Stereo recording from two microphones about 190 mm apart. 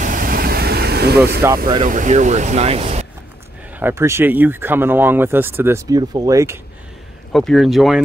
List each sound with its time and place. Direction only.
0.0 s vehicle: 45° right (ahead or behind)
1.9 s speech: 40° right (ahead or behind)
3.7 s speech: 10° right (ahead or behind)
7.3 s speech: centre (ahead or behind)